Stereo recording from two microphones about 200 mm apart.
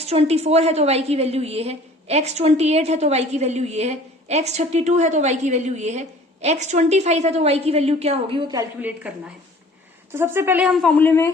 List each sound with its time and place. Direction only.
0.0 s a woman's voice: 30° right (ahead or behind)
8.8 s a woman's voice: 5° right (ahead or behind); by 11.3 s 10° left (ahead or behind)